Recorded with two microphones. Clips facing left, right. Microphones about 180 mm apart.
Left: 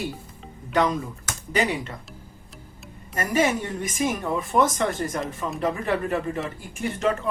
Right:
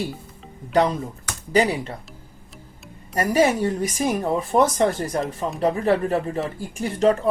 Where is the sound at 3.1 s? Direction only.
35° right (ahead or behind).